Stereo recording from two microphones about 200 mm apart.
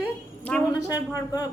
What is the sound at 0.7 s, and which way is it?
Speech, 15° left (ahead or behind).